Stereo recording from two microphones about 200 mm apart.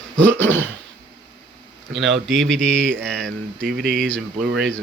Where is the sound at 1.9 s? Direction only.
65° right (ahead or behind).